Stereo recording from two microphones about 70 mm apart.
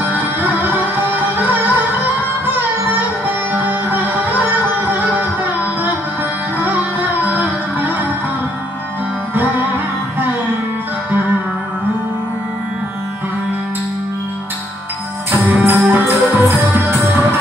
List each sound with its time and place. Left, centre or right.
0.0 s music: right
6.6 s music: right
15.4 s music: right